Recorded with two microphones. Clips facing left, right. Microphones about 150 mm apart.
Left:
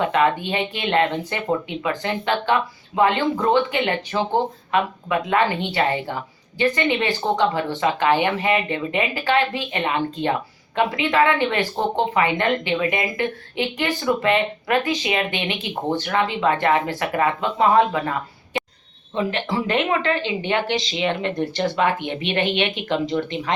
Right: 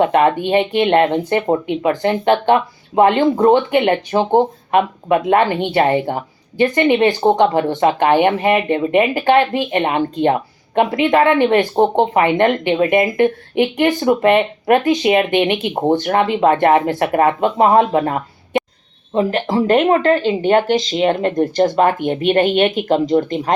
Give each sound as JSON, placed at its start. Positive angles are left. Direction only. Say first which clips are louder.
{"t": 0.0, "sound": "speech", "louder": "right 6 dB", "side_deg": -50}